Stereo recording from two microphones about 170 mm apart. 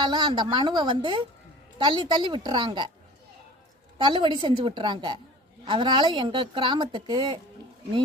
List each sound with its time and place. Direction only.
0.1 s speech: 25° right (ahead or behind)
3.9 s speech: 30° right (ahead or behind)